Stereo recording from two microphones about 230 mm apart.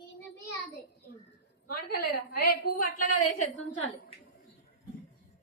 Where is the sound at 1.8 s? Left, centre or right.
Left.